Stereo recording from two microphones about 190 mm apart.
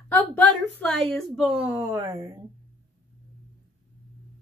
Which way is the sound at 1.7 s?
15° right (ahead or behind).